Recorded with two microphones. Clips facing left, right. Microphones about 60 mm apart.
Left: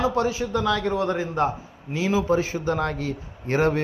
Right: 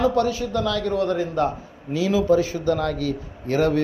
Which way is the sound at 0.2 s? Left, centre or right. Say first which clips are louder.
Right 2 dB; centre.